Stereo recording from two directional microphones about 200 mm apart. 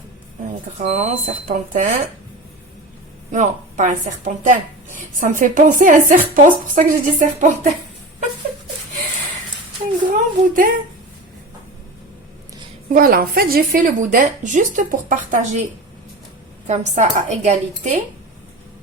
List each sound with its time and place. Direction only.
0.8 s a woman's voice: 35° right (ahead or behind)
3.3 s a woman's voice: 35° right (ahead or behind)
10.1 s a woman's voice: 40° right (ahead or behind)
12.9 s a woman's voice: 45° right (ahead or behind)
16.6 s a woman's voice: 35° right (ahead or behind)